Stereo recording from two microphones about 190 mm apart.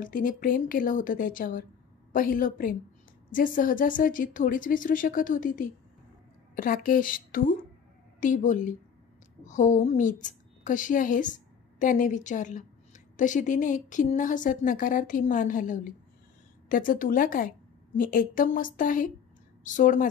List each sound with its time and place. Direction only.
0.0 s a woman's voice: 45° left (ahead or behind)